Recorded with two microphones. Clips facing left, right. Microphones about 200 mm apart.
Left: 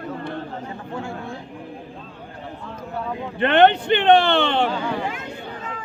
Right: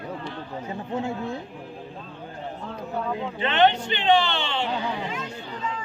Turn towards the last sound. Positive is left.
turn(degrees=55)  # may be behind; listen again after turning